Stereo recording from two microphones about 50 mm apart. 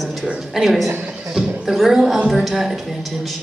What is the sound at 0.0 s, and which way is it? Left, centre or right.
A woman's voice, centre.